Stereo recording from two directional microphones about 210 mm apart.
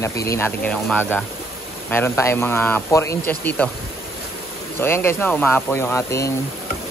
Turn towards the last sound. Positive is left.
turn(degrees=15)  # may be behind; listen again after turning